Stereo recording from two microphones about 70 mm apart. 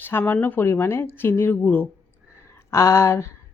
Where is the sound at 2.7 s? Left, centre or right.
Left.